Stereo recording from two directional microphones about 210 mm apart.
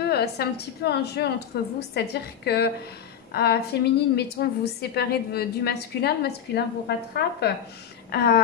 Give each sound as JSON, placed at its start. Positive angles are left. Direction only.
{"t": 0.0, "sound": "a woman's voice", "side_deg": 50}